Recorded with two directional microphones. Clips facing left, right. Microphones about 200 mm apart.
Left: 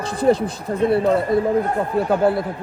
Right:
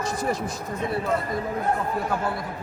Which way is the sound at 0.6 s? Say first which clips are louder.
Left 11 dB; 60° left (ahead or behind).